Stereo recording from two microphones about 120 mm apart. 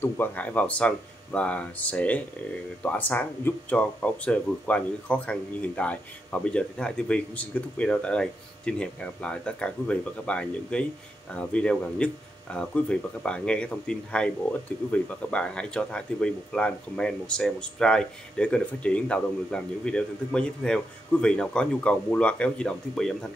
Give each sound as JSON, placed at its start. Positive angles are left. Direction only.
{"t": 0.0, "sound": "speech", "side_deg": 15}